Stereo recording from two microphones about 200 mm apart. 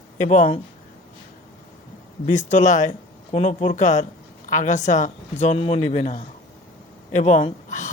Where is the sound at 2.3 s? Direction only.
35° left (ahead or behind).